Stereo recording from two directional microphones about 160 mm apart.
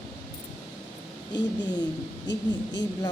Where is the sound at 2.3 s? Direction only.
90° left.